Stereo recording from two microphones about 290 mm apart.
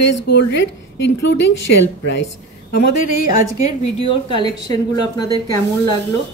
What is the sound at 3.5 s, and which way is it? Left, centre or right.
Speech, left.